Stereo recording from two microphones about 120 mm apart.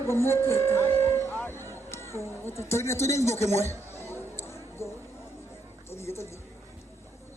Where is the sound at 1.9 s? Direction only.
20° left (ahead or behind).